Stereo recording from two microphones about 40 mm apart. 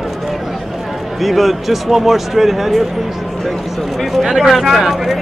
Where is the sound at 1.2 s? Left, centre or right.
Centre.